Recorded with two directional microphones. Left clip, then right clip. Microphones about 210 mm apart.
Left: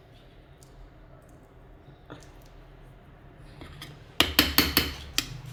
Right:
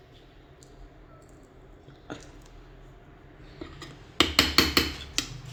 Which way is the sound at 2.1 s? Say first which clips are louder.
Right 5 dB; 40° right (ahead or behind).